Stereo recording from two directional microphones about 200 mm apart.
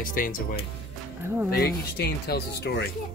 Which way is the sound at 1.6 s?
50° left (ahead or behind).